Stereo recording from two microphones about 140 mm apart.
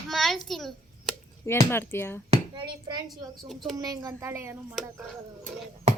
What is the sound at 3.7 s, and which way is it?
Speech, 25° right (ahead or behind).